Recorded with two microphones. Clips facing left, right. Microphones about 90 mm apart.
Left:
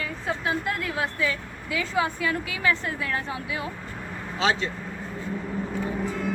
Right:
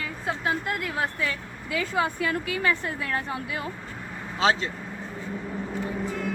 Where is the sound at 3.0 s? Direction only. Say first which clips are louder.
Even; 40° right (ahead or behind).